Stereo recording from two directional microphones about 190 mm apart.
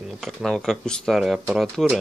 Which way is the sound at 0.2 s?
Centre (ahead or behind).